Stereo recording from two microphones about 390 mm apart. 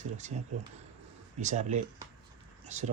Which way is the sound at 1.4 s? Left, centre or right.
Centre.